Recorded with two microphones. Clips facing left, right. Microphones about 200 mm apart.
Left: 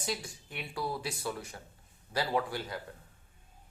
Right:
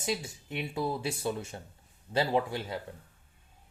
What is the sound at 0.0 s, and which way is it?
Speech, 20° right (ahead or behind).